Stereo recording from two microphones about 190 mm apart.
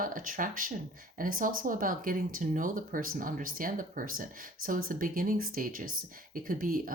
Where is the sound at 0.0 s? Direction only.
45° right (ahead or behind).